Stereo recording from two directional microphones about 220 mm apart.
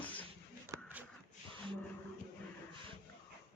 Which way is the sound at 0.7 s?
10° right (ahead or behind).